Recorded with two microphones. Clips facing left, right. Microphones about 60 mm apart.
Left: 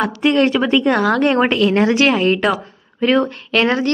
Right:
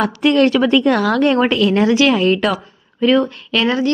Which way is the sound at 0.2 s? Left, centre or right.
Left.